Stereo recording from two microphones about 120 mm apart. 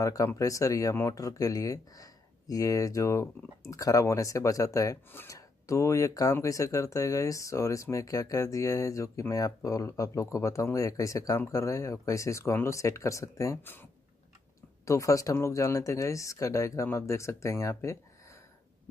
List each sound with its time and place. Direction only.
0.0 s speech: 25° left (ahead or behind)
14.9 s speech: 25° left (ahead or behind)